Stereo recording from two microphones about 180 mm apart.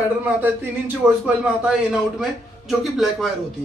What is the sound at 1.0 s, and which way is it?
A man's voice, 5° right (ahead or behind).